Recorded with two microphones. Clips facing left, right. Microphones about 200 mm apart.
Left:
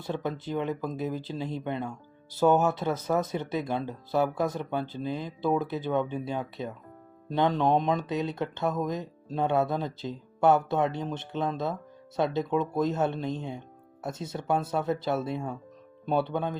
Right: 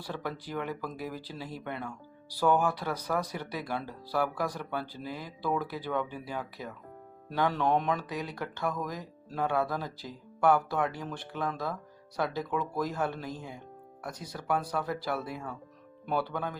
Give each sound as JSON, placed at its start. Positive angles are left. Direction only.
{"t": 0.0, "sound": "speech", "side_deg": 20}